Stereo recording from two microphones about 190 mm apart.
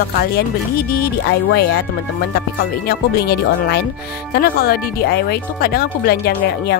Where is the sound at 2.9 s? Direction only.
55° left (ahead or behind).